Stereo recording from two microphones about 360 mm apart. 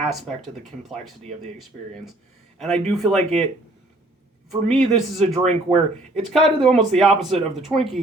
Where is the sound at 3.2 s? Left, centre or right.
Centre.